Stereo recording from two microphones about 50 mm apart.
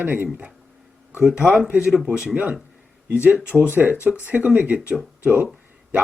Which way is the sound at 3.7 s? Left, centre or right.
Right.